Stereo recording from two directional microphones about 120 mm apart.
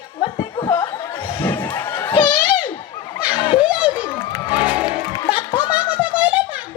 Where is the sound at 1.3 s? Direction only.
40° left (ahead or behind).